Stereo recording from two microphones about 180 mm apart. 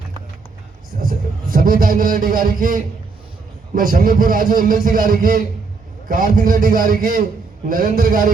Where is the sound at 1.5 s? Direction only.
50° right (ahead or behind).